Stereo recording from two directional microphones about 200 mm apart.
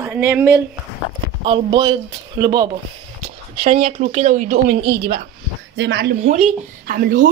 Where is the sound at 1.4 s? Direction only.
25° right (ahead or behind).